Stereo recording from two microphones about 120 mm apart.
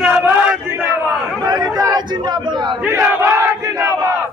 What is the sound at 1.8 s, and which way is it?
Speech, 35° right (ahead or behind).